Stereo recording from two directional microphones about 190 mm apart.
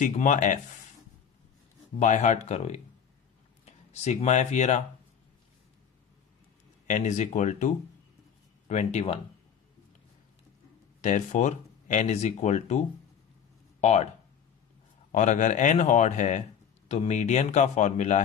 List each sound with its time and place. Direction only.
0.0 s speech: 40° left (ahead or behind)
2.0 s speech: 40° left (ahead or behind)
6.8 s speech: 40° left (ahead or behind)
11.0 s speech: 40° left (ahead or behind)
13.8 s speech: 35° left (ahead or behind)
15.1 s speech: 40° left (ahead or behind)